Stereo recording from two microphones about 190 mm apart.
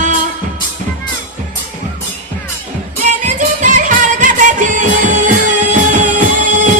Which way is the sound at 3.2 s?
40° right (ahead or behind).